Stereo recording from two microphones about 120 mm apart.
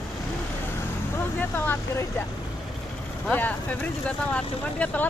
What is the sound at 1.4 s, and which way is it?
Speech, 15° left (ahead or behind).